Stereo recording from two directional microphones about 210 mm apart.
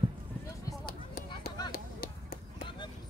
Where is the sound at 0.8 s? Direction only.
45° left (ahead or behind).